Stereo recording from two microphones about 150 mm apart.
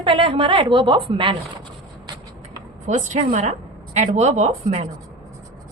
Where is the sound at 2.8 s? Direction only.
55° right (ahead or behind).